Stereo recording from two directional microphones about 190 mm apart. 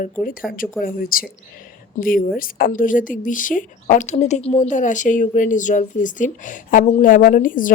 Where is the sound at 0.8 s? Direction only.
50° left (ahead or behind).